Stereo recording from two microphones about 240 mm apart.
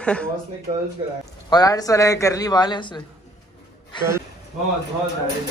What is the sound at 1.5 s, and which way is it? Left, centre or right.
A man's voice, centre.